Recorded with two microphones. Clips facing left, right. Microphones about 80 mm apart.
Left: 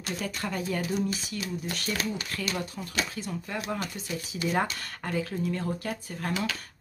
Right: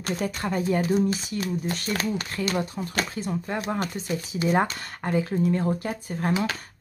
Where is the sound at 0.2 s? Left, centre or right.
Right.